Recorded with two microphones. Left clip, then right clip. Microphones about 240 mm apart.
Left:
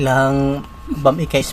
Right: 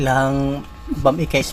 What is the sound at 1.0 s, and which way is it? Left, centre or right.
Speech, centre.